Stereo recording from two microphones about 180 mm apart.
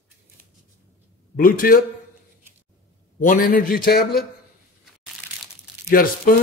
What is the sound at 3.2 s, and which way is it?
A man's voice, 50° left (ahead or behind).